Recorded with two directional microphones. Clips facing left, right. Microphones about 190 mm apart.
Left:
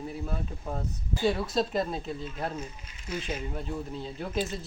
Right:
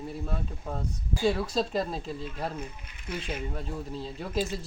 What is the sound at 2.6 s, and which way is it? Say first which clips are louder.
Speech: even; 55° right (ahead or behind).